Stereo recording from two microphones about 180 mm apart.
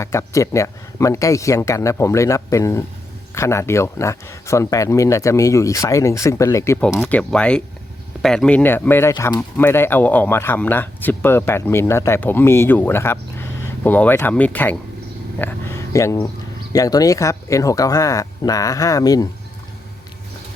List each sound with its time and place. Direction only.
0.0 s speech: 15° left (ahead or behind)
6.7 s speech: 5° left (ahead or behind)